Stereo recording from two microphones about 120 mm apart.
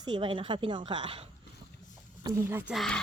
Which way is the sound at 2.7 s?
Centre (ahead or behind).